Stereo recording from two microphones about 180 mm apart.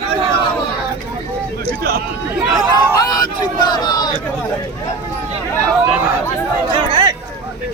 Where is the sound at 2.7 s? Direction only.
20° left (ahead or behind).